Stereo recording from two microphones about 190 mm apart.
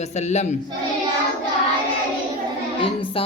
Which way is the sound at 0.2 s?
35° left (ahead or behind).